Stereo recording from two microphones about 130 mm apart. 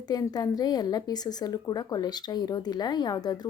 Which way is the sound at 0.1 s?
30° left (ahead or behind).